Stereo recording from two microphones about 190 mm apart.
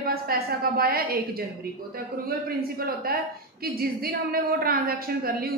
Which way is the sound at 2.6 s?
50° right (ahead or behind).